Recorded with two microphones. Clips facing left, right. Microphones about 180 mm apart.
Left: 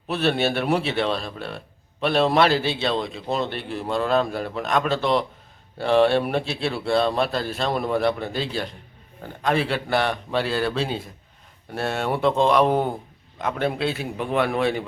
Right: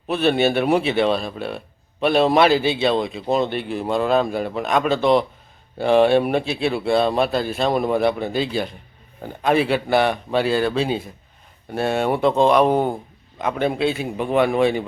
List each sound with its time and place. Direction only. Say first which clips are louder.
0.1 s a man's voice: right 4 dB; centre (ahead or behind)
7.7 s a man's voice: right 3 dB; 15° right (ahead or behind)